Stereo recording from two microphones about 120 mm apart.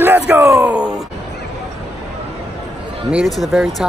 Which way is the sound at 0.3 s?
25° right (ahead or behind).